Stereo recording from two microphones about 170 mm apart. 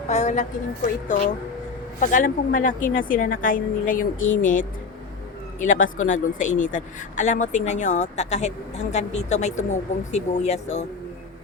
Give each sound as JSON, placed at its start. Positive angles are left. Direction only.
{"t": 0.1, "sound": "a woman's voice", "side_deg": 40}
{"t": 6.1, "sound": "a woman's voice", "side_deg": 50}